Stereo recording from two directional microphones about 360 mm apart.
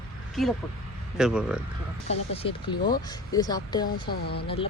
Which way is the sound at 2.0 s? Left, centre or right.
Centre.